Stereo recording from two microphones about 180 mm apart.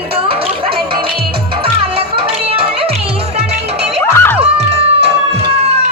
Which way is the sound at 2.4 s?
30° right (ahead or behind).